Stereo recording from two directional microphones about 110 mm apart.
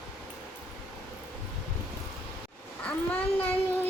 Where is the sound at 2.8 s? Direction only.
15° left (ahead or behind).